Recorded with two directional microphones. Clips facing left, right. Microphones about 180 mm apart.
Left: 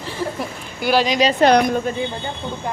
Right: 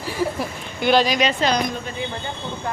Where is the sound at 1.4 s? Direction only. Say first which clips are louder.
Left 7 dB; 60° left (ahead or behind).